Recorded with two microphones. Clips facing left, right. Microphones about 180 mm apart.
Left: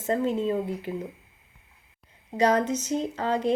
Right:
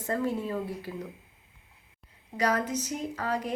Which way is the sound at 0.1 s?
20° left (ahead or behind).